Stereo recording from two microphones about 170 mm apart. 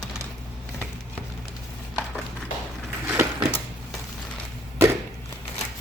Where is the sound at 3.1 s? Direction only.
15° right (ahead or behind).